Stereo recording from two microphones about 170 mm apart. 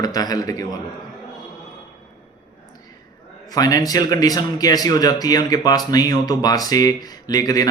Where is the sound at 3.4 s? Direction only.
20° left (ahead or behind).